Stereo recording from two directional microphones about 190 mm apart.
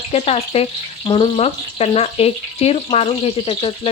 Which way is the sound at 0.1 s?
30° left (ahead or behind).